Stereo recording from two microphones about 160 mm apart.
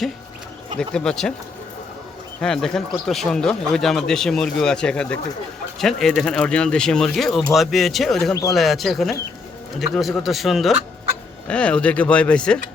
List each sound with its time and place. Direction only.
0.8 s speech: 5° left (ahead or behind)
2.4 s speech: 5° left (ahead or behind)
8.3 s speech: 25° left (ahead or behind)
8.5 s speech: centre (ahead or behind)